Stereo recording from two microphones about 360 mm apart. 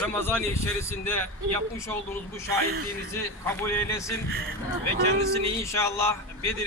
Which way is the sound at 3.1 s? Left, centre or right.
Centre.